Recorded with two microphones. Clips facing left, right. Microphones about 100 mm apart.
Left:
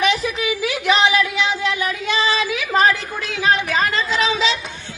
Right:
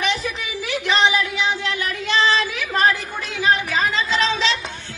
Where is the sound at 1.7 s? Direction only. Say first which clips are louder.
Left 1 dB; 15° left (ahead or behind).